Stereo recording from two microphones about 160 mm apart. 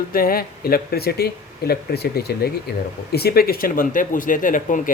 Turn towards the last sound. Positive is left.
turn(degrees=55)  # may be behind; listen again after turning